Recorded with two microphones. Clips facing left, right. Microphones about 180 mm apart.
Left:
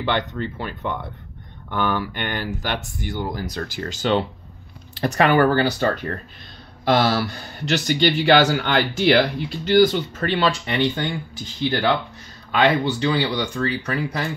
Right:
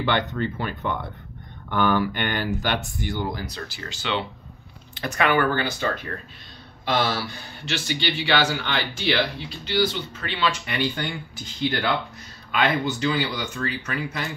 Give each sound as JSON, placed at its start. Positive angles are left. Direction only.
{"t": 0.0, "sound": "speech", "side_deg": 30}
{"t": 12.4, "sound": "speech", "side_deg": 30}